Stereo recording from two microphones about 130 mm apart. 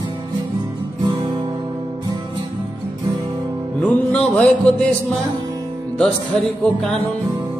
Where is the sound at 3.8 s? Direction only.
10° left (ahead or behind).